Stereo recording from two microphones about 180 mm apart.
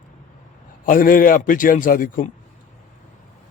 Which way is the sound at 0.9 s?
50° left (ahead or behind).